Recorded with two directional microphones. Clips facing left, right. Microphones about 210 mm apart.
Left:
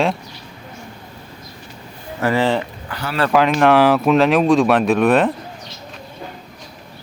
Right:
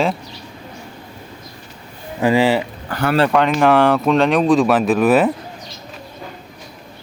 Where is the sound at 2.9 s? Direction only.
55° right (ahead or behind).